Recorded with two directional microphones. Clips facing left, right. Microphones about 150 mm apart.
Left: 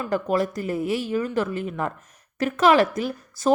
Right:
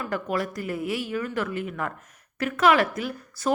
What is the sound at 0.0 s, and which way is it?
A woman's voice, 30° left (ahead or behind).